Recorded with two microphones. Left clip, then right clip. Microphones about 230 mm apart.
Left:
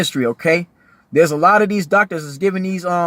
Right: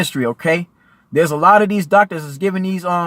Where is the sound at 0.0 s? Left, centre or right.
Right.